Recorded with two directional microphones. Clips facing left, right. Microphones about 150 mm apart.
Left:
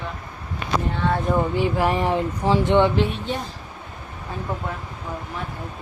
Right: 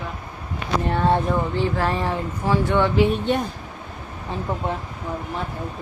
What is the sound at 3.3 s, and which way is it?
Speech, 60° right (ahead or behind).